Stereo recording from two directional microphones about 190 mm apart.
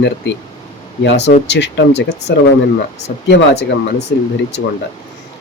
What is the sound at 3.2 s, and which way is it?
Speech, 70° left (ahead or behind).